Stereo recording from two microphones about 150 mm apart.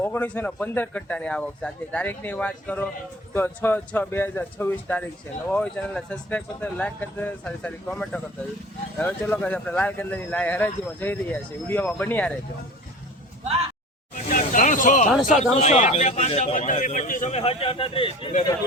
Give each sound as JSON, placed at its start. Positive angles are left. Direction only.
{"t": 0.0, "sound": "speech", "side_deg": 15}
{"t": 14.1, "sound": "a sound", "side_deg": 60}
{"t": 15.5, "sound": "a man's voice", "side_deg": 50}
{"t": 17.3, "sound": "speech", "side_deg": 40}